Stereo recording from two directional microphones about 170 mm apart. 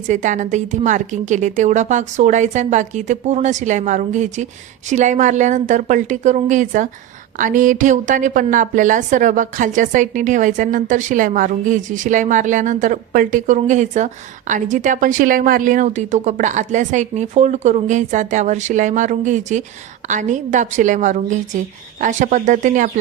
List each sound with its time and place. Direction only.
0.1 s a woman's voice: 45° right (ahead or behind)